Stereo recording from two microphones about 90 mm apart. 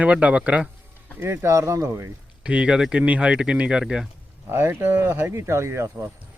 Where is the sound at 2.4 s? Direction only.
10° right (ahead or behind).